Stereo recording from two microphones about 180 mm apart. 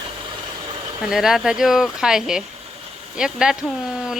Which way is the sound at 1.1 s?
Centre (ahead or behind).